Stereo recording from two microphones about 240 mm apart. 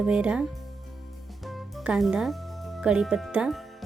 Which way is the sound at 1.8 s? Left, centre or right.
Centre.